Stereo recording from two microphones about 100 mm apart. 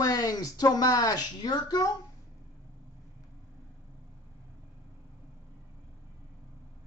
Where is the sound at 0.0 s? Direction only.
40° left (ahead or behind).